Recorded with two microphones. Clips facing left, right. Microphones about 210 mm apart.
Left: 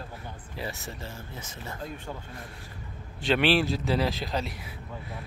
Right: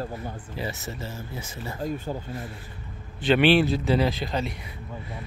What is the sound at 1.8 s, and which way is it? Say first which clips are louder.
Speech: right 10 dB; 40° right (ahead or behind).